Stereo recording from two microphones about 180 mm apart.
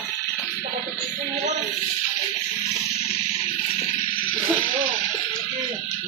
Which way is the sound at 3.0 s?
35° left (ahead or behind).